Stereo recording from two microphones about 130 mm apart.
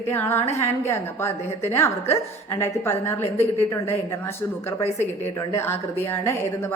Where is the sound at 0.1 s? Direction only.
20° left (ahead or behind).